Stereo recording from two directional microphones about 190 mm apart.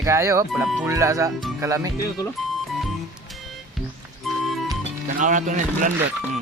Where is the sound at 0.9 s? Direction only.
15° right (ahead or behind).